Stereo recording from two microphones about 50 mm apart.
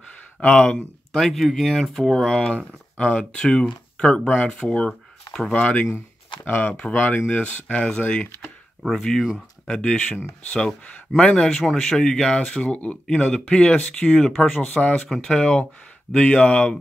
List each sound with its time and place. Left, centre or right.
0.5 s speech: left
1.2 s speech: centre
2.5 s speech: centre
5.5 s speech: left
9.7 s speech: centre
11.1 s speech: centre
13.0 s speech: centre
14.7 s speech: left
15.1 s speech: centre